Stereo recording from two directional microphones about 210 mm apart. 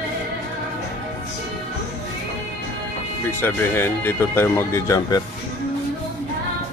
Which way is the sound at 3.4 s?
10° left (ahead or behind).